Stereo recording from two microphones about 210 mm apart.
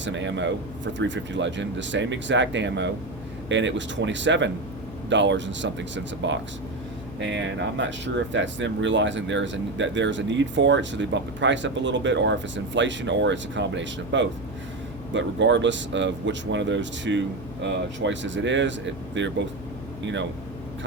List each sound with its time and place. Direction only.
0.0 s speech: 60° right (ahead or behind)